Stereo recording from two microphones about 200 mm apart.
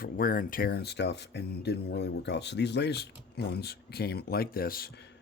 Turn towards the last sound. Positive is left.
turn(degrees=55)  # may be behind; listen again after turning